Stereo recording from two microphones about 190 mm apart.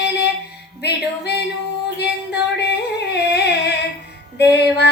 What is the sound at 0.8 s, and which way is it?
Music, 60° left (ahead or behind).